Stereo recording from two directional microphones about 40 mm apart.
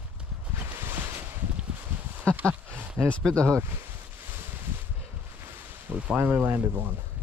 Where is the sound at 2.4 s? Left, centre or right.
Right.